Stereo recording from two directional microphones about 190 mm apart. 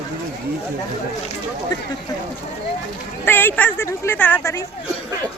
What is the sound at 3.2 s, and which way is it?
A woman's voice, 10° left (ahead or behind).